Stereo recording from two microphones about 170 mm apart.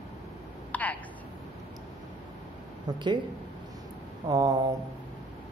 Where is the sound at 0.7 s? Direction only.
10° left (ahead or behind).